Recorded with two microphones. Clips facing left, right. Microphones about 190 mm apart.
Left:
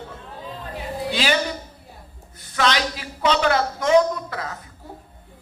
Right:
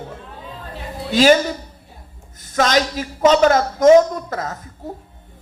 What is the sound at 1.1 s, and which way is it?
Speech, 45° right (ahead or behind).